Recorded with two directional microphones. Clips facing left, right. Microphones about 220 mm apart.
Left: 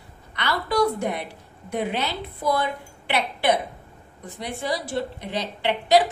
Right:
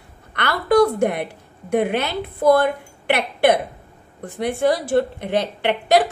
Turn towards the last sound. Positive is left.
turn(degrees=-55)  # may be behind; listen again after turning